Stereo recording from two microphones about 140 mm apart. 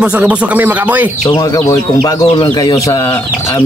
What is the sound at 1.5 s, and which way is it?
Speech, 25° left (ahead or behind).